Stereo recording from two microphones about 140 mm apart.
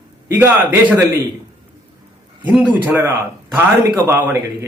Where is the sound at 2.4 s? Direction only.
10° right (ahead or behind).